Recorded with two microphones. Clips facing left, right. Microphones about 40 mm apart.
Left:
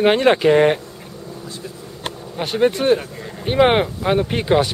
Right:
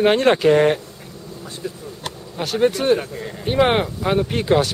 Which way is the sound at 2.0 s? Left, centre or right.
Left.